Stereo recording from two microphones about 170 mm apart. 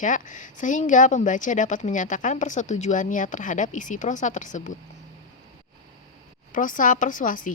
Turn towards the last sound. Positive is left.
turn(degrees=50)  # may be behind; listen again after turning